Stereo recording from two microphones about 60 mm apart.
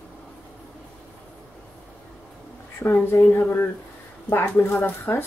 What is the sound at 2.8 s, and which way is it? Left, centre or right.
Speech, left.